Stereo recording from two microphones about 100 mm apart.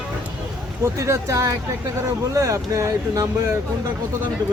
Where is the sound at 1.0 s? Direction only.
30° right (ahead or behind).